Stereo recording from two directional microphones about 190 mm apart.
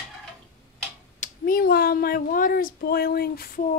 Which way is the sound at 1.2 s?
50° left (ahead or behind).